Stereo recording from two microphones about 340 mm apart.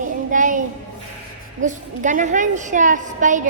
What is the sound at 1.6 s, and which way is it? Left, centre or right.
A woman's voice, right.